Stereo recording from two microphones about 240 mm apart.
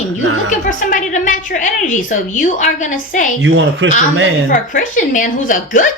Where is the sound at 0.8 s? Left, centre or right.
Left.